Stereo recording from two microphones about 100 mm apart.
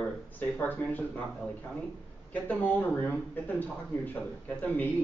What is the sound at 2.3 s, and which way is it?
A man's voice, 15° left (ahead or behind).